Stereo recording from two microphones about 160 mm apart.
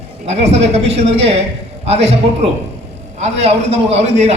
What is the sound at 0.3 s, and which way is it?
A man's voice, 45° right (ahead or behind).